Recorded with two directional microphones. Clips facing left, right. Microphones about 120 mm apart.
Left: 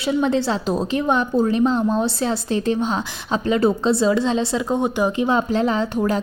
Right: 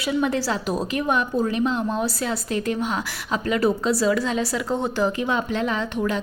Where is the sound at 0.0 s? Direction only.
25° left (ahead or behind).